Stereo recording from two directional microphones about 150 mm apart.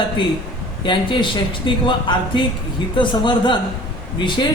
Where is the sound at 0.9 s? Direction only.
35° left (ahead or behind).